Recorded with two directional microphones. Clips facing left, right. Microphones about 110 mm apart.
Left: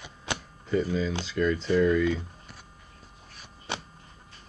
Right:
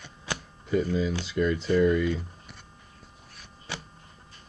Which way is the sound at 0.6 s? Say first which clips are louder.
Right 1 dB; centre (ahead or behind).